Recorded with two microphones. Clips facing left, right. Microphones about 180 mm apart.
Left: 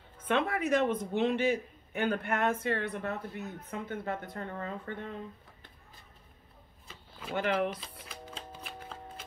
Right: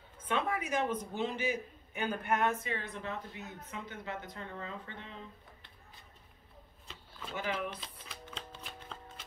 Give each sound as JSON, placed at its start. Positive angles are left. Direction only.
{"t": 0.2, "sound": "a man's voice", "side_deg": 65}
{"t": 7.2, "sound": "a man's voice", "side_deg": 65}